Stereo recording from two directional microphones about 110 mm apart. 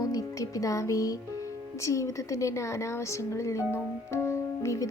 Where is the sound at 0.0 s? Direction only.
30° left (ahead or behind).